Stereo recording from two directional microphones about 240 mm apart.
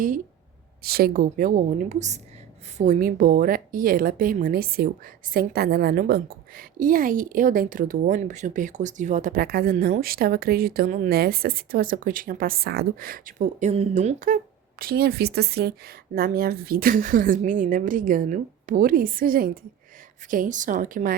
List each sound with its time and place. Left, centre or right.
0.8 s a woman's voice: right